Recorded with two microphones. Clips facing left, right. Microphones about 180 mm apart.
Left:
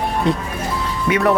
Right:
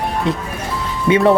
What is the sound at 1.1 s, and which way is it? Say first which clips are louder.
Speech: right 5 dB; 25° right (ahead or behind).